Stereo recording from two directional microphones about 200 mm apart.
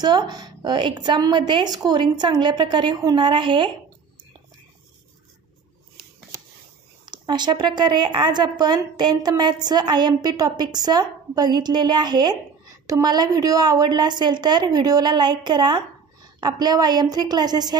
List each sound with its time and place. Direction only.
0.0 s speech: 20° right (ahead or behind)
7.1 s speech: 20° right (ahead or behind)